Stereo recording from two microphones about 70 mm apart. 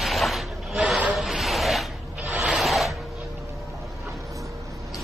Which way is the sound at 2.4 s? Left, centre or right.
Centre.